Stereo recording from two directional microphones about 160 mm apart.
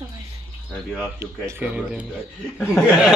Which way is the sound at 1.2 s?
15° right (ahead or behind).